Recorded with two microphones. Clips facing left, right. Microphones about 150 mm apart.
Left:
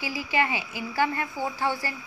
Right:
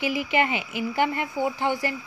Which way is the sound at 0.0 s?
20° right (ahead or behind).